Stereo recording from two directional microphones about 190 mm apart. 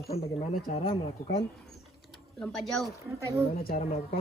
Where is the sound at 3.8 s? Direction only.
35° left (ahead or behind).